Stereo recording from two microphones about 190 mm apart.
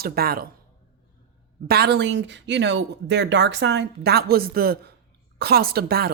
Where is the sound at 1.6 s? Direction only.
55° right (ahead or behind).